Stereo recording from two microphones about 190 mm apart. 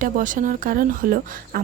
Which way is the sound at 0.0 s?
45° right (ahead or behind).